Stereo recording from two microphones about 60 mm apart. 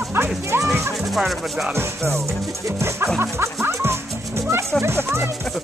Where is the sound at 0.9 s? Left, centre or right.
Centre.